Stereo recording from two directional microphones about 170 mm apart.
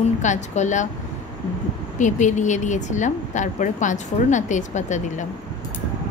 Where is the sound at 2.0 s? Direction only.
45° left (ahead or behind).